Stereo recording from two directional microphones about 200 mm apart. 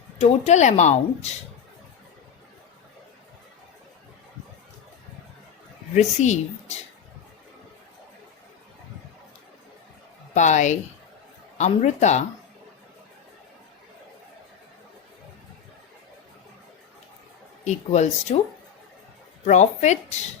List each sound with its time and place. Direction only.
0.2 s a woman's voice: 35° left (ahead or behind)
5.9 s a woman's voice: 35° left (ahead or behind)
10.3 s a woman's voice: 35° left (ahead or behind)
17.7 s a woman's voice: 35° left (ahead or behind)
19.5 s a woman's voice: 35° left (ahead or behind)